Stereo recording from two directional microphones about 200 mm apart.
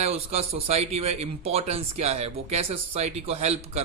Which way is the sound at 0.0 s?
30° right (ahead or behind).